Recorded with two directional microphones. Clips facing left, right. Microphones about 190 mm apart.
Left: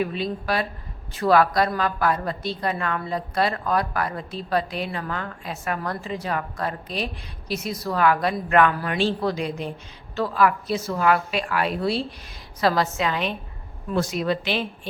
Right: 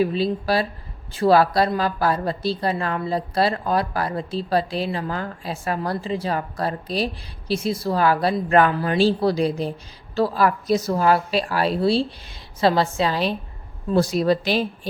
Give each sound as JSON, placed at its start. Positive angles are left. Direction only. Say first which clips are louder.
{"t": 0.0, "sound": "a woman's voice", "louder": "right 5 dB", "side_deg": -30}